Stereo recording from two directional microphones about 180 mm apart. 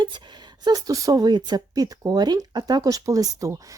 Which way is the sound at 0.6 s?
20° right (ahead or behind).